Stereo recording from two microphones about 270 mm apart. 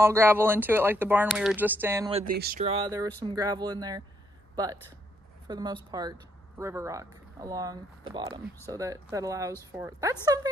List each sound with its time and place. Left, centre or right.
0.0 s speech: centre
2.0 s speech: right
2.3 s speech: right
2.6 s speech: centre